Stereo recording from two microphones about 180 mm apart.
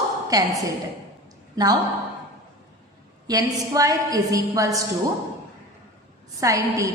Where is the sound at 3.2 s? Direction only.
20° right (ahead or behind).